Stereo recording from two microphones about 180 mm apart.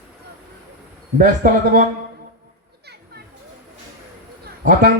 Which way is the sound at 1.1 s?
55° right (ahead or behind).